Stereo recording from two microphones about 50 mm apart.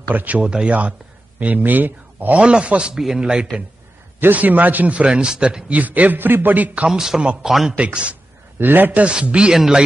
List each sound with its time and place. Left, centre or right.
0.1 s a man's voice: right
0.4 s a man's voice: centre
1.4 s a man's voice: right
2.4 s a man's voice: right
4.2 s a man's voice: right; by 5.7 s centre
5.7 s a man's voice: right
6.9 s speech: centre
7.7 s a man's voice: right
8.5 s a man's voice: right
9.0 s a man's voice: right